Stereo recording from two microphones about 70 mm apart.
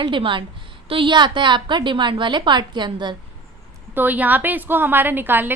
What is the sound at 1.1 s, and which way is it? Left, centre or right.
A woman's voice, right.